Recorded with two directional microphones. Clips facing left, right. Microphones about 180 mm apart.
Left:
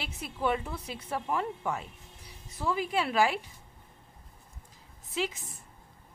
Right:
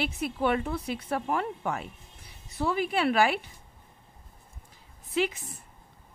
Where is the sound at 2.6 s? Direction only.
70° right (ahead or behind).